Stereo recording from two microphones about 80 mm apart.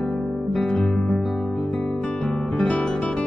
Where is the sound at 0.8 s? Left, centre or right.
Centre.